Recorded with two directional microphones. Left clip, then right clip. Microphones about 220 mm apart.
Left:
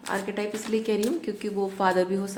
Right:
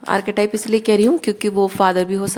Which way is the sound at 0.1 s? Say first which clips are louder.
Right 12 dB; 45° right (ahead or behind).